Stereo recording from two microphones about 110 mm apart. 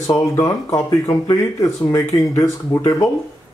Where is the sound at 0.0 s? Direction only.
30° left (ahead or behind).